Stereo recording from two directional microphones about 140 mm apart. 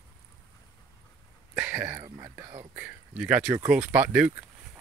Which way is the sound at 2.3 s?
25° right (ahead or behind).